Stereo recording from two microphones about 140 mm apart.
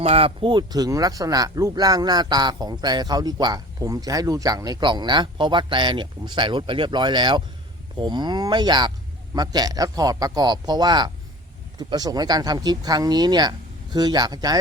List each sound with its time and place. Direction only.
0.0 s a man's voice: 45° right (ahead or behind); by 14.6 s 30° right (ahead or behind)